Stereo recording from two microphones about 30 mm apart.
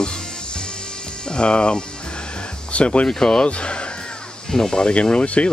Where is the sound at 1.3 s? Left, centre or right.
Left.